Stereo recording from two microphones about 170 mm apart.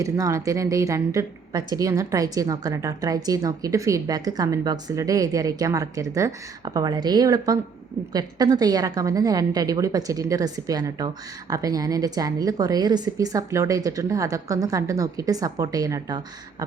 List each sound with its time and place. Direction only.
0.0 s a woman's voice: 20° right (ahead or behind)